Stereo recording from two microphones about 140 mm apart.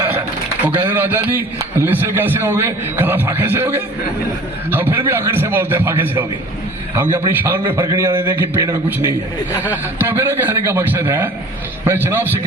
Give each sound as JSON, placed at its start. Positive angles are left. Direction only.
{"t": 0.0, "sound": "a man's voice", "side_deg": -15}
{"t": 9.6, "sound": "a man's voice", "side_deg": -15}